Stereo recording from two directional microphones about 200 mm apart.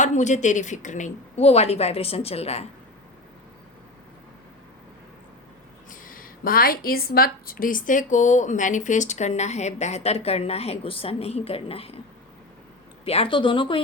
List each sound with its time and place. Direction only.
0.0 s a woman's voice: 35° left (ahead or behind)
5.9 s a woman's voice: 45° left (ahead or behind); by 11.9 s 30° left (ahead or behind)
13.1 s speech: 30° left (ahead or behind)